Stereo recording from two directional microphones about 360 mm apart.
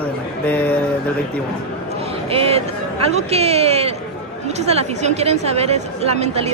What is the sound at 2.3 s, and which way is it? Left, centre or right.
A woman's voice, centre.